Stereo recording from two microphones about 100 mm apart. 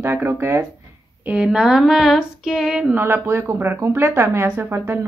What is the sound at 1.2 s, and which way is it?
Speech, 10° right (ahead or behind).